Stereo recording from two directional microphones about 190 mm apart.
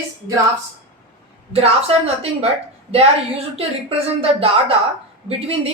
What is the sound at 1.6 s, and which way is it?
Speech, 30° right (ahead or behind).